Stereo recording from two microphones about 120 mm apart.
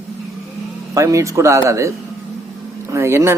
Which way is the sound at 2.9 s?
25° right (ahead or behind).